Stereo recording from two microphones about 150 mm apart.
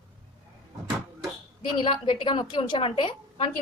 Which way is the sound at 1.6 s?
30° left (ahead or behind).